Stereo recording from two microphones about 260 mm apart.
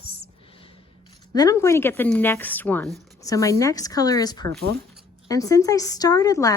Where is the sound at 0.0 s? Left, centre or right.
Left.